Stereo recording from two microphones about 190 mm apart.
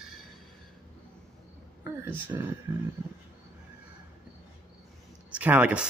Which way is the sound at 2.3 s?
15° right (ahead or behind).